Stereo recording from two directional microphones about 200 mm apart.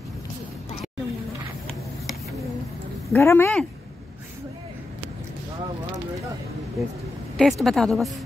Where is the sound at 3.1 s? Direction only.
10° left (ahead or behind).